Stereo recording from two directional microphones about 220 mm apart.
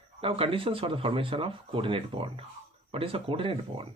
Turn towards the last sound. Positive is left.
turn(degrees=-25)  # may be behind; listen again after turning